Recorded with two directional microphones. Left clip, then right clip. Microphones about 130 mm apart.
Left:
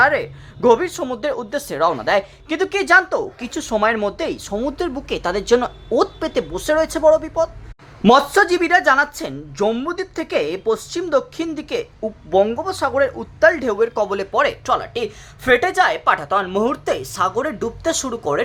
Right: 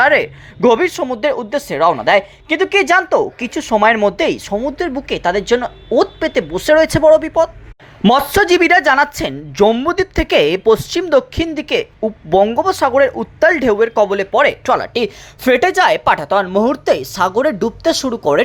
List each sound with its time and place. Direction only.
0.0 s speech: 25° right (ahead or behind)
4.0 s speech: 25° right (ahead or behind)
4.6 s speech: 5° right (ahead or behind)
14.7 s a woman's voice: 30° right (ahead or behind)